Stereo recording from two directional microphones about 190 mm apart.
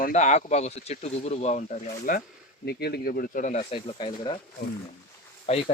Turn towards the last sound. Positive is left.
turn(degrees=35)  # may be behind; listen again after turning